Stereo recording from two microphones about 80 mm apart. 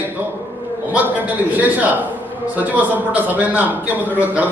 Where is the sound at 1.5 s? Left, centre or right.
Right.